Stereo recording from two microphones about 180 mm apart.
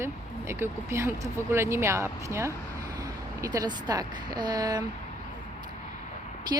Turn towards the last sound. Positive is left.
turn(degrees=-20)  # may be behind; listen again after turning